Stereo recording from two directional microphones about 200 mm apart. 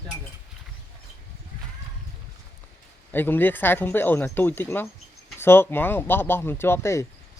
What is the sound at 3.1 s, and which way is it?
Speech, 10° left (ahead or behind).